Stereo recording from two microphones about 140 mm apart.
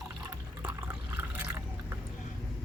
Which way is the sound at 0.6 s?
10° right (ahead or behind).